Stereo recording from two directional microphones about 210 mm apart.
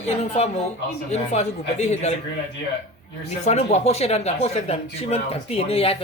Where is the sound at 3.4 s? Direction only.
30° left (ahead or behind).